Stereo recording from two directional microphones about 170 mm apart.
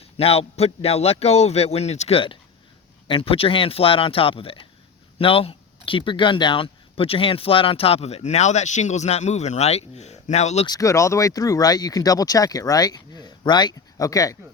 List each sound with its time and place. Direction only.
0.0 s speech: 35° left (ahead or behind)
10.7 s speech: 20° left (ahead or behind)